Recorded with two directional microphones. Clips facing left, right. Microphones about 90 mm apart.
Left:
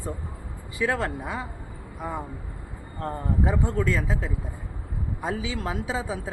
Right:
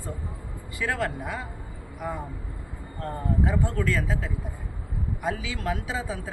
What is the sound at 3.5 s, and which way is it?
Speech, 20° left (ahead or behind).